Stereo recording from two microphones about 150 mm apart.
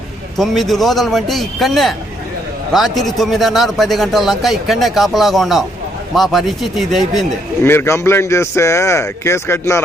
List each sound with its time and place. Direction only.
0.3 s a man's voice: centre (ahead or behind)
7.6 s a man's voice: 15° left (ahead or behind)